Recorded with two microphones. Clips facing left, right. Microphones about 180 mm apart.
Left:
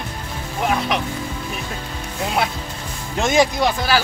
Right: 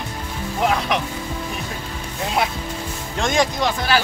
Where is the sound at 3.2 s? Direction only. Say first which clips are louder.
Left 3 dB; 5° left (ahead or behind).